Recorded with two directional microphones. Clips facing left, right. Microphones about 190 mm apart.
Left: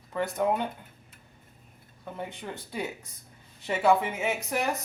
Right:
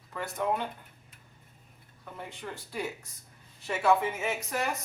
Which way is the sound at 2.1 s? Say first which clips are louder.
Left 3 dB; 20° left (ahead or behind).